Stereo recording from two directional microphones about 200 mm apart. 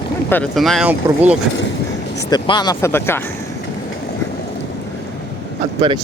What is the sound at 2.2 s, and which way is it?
Speech, 20° left (ahead or behind).